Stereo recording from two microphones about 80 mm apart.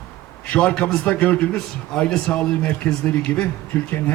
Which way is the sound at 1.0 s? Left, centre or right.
Left.